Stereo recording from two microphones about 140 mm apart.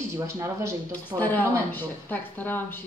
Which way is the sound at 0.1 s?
20° right (ahead or behind).